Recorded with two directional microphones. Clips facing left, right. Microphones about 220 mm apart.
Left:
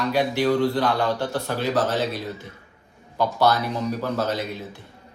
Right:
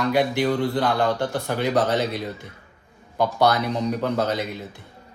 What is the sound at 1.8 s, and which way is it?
Speech, 65° right (ahead or behind).